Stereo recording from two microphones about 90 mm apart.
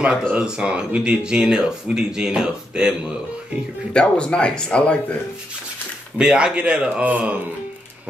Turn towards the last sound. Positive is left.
turn(degrees=-15)  # may be behind; listen again after turning